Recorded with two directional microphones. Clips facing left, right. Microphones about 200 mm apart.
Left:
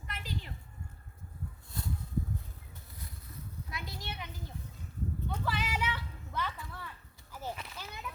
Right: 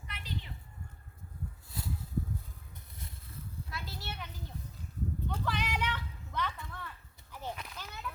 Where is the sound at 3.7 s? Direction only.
15° left (ahead or behind).